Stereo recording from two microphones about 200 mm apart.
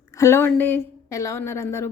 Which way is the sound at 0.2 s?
10° left (ahead or behind).